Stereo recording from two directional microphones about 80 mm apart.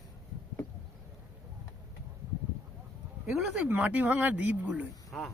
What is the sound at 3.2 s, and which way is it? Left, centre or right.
Speech, centre.